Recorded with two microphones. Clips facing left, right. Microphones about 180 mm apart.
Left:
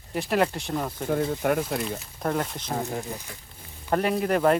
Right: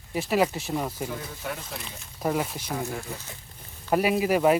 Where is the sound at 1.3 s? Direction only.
60° left (ahead or behind).